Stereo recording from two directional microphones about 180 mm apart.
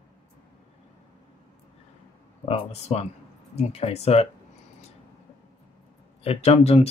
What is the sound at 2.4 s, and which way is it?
Speech, 35° left (ahead or behind).